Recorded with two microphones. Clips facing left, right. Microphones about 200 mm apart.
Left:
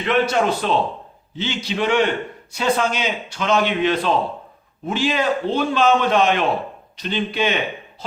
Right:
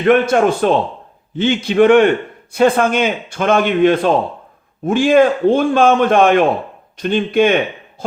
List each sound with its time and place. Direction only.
0.0 s a man's voice: 50° right (ahead or behind)